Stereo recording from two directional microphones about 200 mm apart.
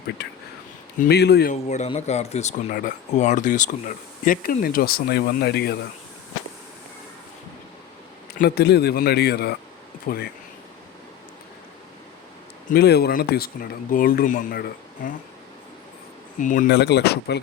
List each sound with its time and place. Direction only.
0.2 s speech: 55° left (ahead or behind)
1.6 s speech: 35° left (ahead or behind); by 5.7 s 55° left (ahead or behind)
8.3 s speech: 50° left (ahead or behind)
12.7 s speech: 55° left (ahead or behind)
16.4 s speech: 40° left (ahead or behind)
16.6 s speech: 55° left (ahead or behind)